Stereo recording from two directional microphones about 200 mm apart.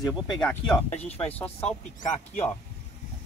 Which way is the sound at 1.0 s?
30° left (ahead or behind).